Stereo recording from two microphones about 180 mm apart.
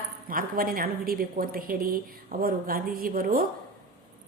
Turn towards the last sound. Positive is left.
turn(degrees=-55)  # may be behind; listen again after turning